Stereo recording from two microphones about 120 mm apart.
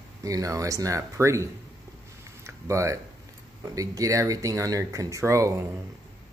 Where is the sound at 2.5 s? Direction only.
25° right (ahead or behind).